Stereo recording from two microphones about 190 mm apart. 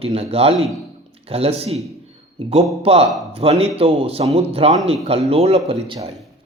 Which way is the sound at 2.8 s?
30° right (ahead or behind).